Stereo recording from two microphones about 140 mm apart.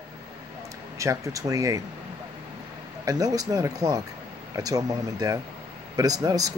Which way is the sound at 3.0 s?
25° right (ahead or behind).